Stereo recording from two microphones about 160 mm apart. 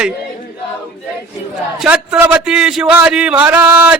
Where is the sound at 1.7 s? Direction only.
5° right (ahead or behind).